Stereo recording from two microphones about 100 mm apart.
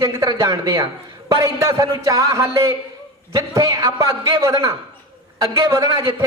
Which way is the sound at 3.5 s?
45° right (ahead or behind).